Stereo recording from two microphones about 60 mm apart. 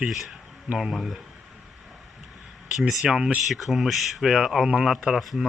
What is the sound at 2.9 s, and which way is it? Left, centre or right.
Speech, centre.